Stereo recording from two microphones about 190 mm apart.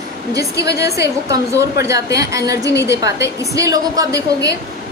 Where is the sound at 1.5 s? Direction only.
15° right (ahead or behind).